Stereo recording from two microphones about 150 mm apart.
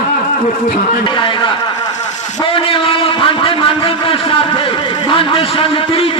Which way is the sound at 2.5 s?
35° left (ahead or behind).